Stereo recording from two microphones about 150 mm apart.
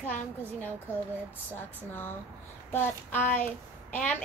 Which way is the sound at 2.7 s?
15° left (ahead or behind).